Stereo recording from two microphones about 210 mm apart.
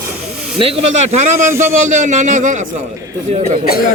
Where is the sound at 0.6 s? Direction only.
30° right (ahead or behind).